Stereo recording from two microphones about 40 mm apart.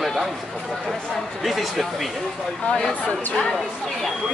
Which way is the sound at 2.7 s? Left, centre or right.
Left.